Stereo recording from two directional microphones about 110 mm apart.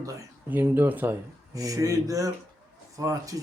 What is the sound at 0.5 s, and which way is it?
Speech, 20° right (ahead or behind).